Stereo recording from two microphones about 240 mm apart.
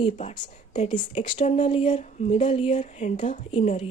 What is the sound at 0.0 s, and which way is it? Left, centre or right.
A woman's voice, left.